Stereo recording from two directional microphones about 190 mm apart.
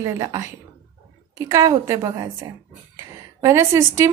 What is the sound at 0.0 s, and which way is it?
Speech, 15° right (ahead or behind).